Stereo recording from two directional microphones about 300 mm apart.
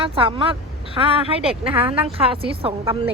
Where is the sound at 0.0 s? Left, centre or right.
Centre.